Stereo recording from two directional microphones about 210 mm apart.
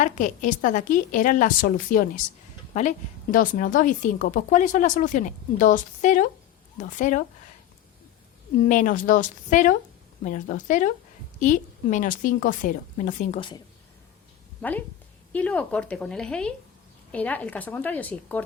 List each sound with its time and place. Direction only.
0.0 s speech: 35° left (ahead or behind)
3.3 s speech: 40° left (ahead or behind)
8.6 s speech: 40° left (ahead or behind)
14.6 s a woman's voice: 5° left (ahead or behind)